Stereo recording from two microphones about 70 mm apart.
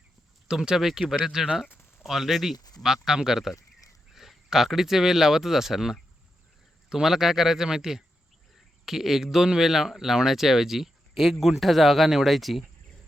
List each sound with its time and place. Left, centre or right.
0.4 s speech: centre